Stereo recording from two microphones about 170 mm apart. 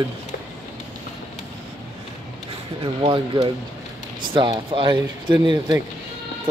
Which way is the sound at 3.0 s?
30° right (ahead or behind).